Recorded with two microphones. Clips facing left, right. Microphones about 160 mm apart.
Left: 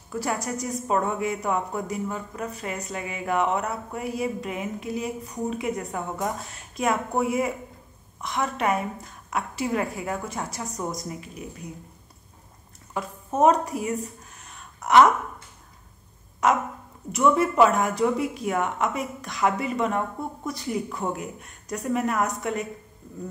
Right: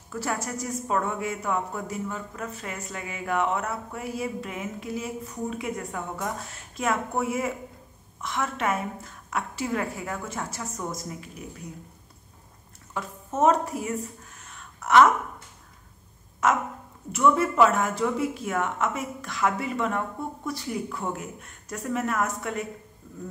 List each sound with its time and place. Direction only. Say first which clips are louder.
0.1 s a woman's voice: left 2 dB; 15° left (ahead or behind)
12.9 s a woman's voice: left 3 dB; 15° left (ahead or behind)
17.1 s a woman's voice: left 1 dB; 15° left (ahead or behind)